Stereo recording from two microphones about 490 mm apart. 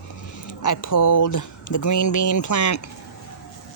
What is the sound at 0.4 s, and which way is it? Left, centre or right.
Speech, left.